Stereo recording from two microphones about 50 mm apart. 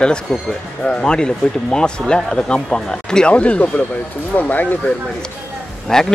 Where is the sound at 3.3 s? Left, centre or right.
Left.